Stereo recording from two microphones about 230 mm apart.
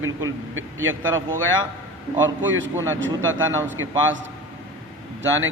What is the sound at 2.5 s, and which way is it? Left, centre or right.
Speech, right.